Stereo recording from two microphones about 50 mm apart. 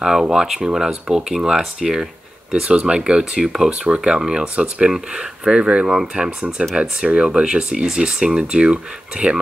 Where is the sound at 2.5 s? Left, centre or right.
Right.